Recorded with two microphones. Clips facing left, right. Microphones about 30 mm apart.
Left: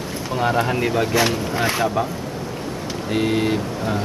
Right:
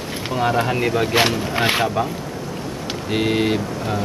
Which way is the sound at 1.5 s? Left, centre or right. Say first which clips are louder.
Right 2 dB; right.